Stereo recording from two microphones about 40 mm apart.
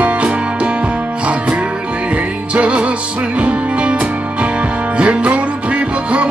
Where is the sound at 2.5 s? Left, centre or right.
Right.